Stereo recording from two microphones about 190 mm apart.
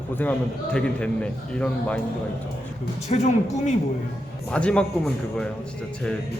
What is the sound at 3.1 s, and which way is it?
Speech, 35° left (ahead or behind).